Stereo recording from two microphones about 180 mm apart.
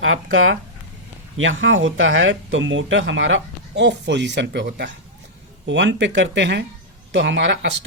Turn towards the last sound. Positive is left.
turn(degrees=-75)  # may be behind; listen again after turning